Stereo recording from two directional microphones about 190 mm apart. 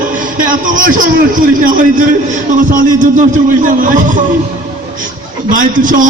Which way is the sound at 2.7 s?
45° right (ahead or behind).